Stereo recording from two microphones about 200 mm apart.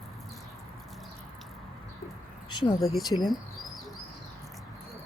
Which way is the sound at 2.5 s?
25° left (ahead or behind).